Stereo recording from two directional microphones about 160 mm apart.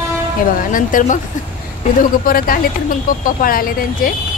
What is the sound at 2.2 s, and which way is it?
Speech, 65° left (ahead or behind).